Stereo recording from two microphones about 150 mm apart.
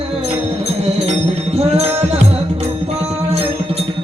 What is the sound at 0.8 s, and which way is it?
Music, 45° right (ahead or behind).